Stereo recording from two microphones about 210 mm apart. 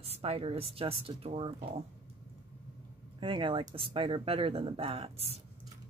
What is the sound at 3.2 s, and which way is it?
Speech, 25° right (ahead or behind).